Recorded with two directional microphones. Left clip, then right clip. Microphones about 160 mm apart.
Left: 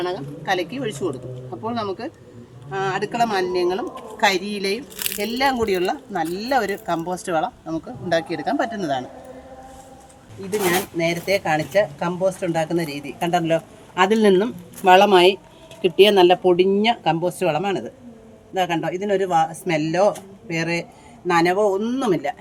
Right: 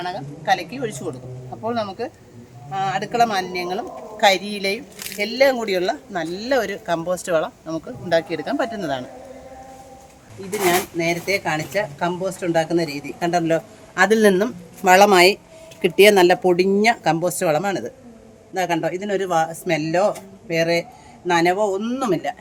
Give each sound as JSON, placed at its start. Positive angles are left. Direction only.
{"t": 0.0, "sound": "speech", "side_deg": -15}
{"t": 8.1, "sound": "a man's voice", "side_deg": -5}
{"t": 10.9, "sound": "speech", "side_deg": -90}
{"t": 11.4, "sound": "speech", "side_deg": -5}
{"t": 14.0, "sound": "a man's voice", "side_deg": -40}
{"t": 15.8, "sound": "speech", "side_deg": -75}
{"t": 18.5, "sound": "speech", "side_deg": -15}